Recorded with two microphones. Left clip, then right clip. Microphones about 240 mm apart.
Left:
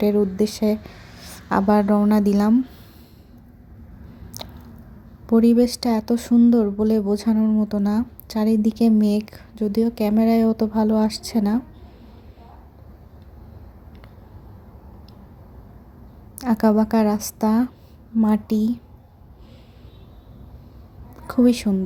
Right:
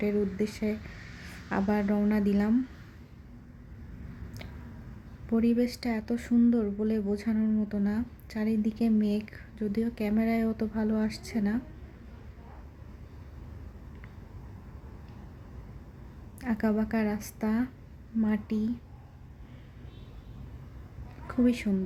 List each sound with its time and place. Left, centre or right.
0.0 s a woman's voice: centre
5.2 s speech: centre
16.4 s speech: centre
21.2 s a woman's voice: centre